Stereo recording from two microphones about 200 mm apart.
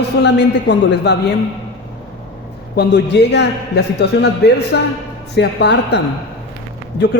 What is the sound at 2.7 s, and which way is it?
A man's voice, 60° left (ahead or behind).